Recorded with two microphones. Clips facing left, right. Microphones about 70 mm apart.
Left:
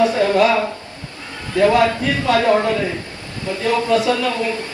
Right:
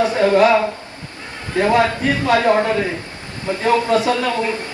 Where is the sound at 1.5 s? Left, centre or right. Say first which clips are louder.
Left 1 dB; right.